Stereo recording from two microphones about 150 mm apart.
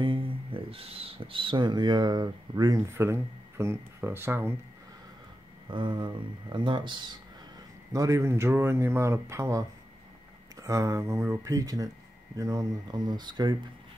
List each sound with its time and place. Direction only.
0.0 s speech: 35° right (ahead or behind); by 4.6 s 15° right (ahead or behind)
5.7 s speech: 30° right (ahead or behind)
7.9 s speech: 20° right (ahead or behind)